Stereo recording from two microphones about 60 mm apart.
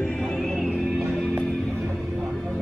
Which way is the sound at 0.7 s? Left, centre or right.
Centre.